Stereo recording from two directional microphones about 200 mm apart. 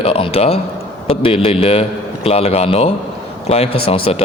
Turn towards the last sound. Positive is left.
turn(degrees=30)  # may be behind; listen again after turning